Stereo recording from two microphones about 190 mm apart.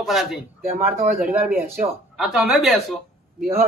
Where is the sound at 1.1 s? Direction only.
45° right (ahead or behind).